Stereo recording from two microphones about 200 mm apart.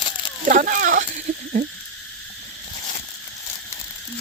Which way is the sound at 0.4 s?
45° right (ahead or behind).